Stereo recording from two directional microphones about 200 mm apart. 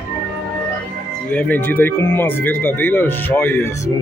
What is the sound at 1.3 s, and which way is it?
Speech, 10° left (ahead or behind).